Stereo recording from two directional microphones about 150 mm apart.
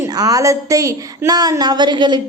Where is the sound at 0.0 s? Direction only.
25° right (ahead or behind).